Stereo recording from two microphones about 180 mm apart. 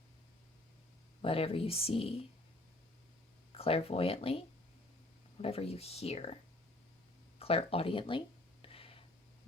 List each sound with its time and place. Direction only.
1.2 s speech: 30° left (ahead or behind)
3.5 s speech: 30° left (ahead or behind)
8.6 s a sound: 30° left (ahead or behind)